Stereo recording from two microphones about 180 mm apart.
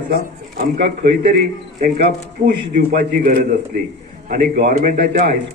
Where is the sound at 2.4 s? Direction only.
50° right (ahead or behind).